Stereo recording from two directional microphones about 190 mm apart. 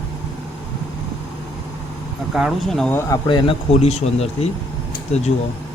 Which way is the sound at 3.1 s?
25° left (ahead or behind).